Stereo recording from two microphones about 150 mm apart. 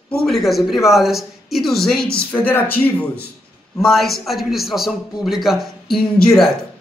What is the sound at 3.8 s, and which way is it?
A man's voice, centre (ahead or behind).